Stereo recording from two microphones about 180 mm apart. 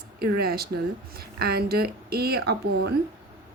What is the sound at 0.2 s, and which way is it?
Speech, 60° right (ahead or behind).